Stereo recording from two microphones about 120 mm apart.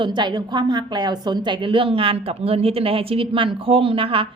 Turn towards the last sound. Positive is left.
turn(degrees=-50)  # may be behind; listen again after turning